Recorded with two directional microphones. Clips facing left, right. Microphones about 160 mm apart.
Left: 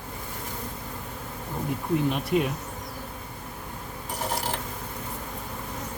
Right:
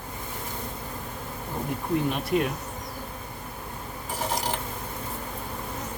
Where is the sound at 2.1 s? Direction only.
Centre (ahead or behind).